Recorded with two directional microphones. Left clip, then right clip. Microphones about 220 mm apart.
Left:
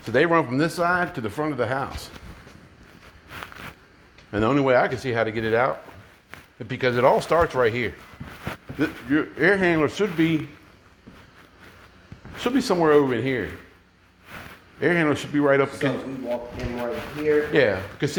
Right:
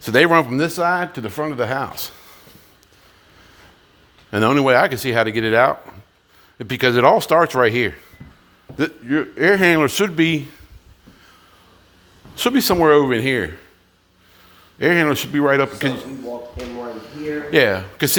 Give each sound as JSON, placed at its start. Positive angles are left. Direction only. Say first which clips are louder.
{"t": 0.0, "sound": "speech", "louder": "right 6 dB", "side_deg": -50}
{"t": 4.3, "sound": "a man's voice", "louder": "right 5 dB", "side_deg": -50}
{"t": 8.8, "sound": "a man's voice", "louder": "right 3 dB", "side_deg": -35}
{"t": 12.4, "sound": "a man's voice", "louder": "right 6 dB", "side_deg": -50}
{"t": 14.8, "sound": "a man's voice", "louder": "right 5 dB", "side_deg": -45}
{"t": 17.5, "sound": "a man's voice", "louder": "right 5 dB", "side_deg": -50}